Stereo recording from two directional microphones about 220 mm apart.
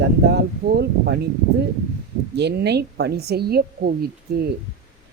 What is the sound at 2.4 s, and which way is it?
A woman's voice, 50° right (ahead or behind).